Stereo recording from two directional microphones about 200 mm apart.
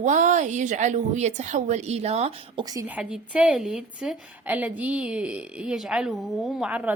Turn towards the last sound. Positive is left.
turn(degrees=-5)  # may be behind; listen again after turning